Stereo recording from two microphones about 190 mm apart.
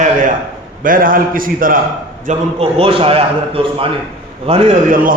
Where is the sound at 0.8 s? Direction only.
45° right (ahead or behind).